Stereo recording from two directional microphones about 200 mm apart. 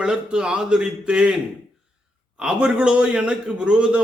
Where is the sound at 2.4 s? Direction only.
5° right (ahead or behind).